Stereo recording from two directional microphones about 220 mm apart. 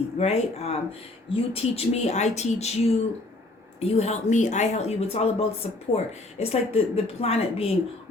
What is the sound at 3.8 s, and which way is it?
Speech, 30° left (ahead or behind).